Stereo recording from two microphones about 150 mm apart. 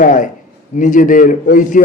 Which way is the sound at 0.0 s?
60° left (ahead or behind).